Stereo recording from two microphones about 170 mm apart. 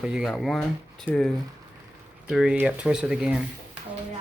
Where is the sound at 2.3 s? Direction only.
Centre (ahead or behind).